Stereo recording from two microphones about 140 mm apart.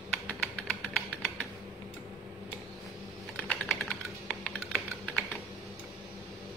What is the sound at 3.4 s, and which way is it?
Typing, 5° left (ahead or behind).